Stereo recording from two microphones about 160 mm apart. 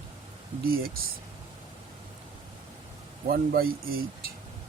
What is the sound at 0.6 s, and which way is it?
Speech, 70° right (ahead or behind).